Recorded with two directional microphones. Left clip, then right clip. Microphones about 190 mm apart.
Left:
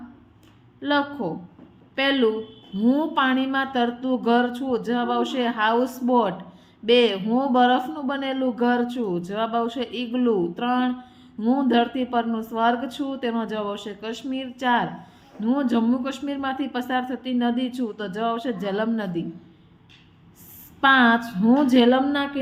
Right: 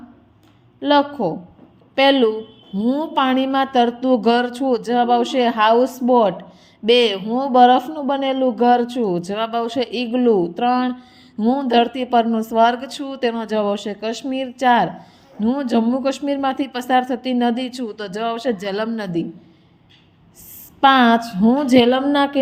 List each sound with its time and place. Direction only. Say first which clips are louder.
0.8 s a woman's voice: right 7 dB; 30° right (ahead or behind)
20.8 s speech: right 4 dB; 30° right (ahead or behind)